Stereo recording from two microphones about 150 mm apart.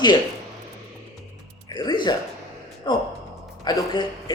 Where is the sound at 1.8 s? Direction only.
30° left (ahead or behind).